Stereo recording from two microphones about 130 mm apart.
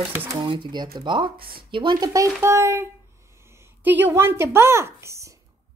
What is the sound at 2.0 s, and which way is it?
A child's voice, 25° right (ahead or behind).